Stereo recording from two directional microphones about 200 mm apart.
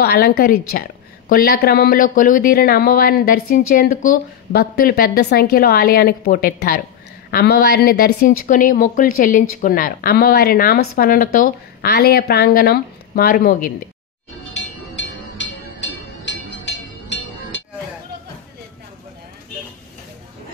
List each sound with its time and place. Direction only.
0.0 s a woman's voice: 50° left (ahead or behind)
1.3 s speech: 50° left (ahead or behind)
14.5 s train: 65° left (ahead or behind)